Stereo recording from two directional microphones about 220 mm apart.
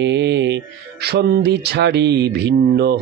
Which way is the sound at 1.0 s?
45° right (ahead or behind).